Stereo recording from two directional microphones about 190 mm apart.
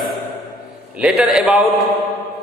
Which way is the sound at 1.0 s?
5° right (ahead or behind).